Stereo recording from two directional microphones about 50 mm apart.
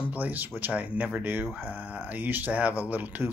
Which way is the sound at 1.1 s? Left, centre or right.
Right.